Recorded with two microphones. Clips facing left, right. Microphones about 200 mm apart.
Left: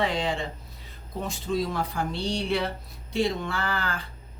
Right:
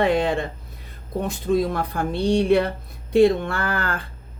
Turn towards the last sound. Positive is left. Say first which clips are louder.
# right 4 dB
turn(degrees=-55)  # may be behind; listen again after turning